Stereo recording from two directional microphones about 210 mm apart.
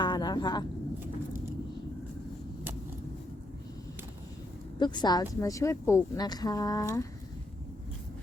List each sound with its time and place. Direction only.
0.0 s vehicle: 20° left (ahead or behind)
4.8 s a woman's voice: 20° left (ahead or behind)